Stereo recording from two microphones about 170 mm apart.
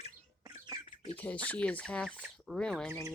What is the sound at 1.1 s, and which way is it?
Speech, 10° left (ahead or behind).